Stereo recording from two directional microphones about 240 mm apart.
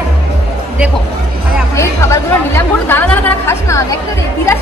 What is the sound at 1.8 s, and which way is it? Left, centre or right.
Speech, centre.